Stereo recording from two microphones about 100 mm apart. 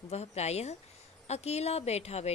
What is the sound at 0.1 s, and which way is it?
A woman's voice, 90° left.